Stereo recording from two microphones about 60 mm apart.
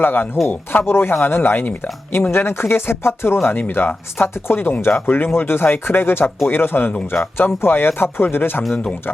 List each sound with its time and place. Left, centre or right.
0.0 s speech: left